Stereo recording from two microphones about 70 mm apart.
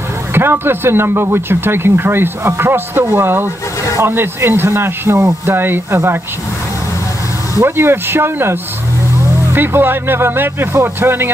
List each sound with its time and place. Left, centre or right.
0.3 s speech: right
7.6 s speech: right